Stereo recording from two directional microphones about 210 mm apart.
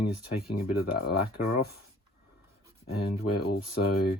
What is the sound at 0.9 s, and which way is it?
Speech, 45° left (ahead or behind).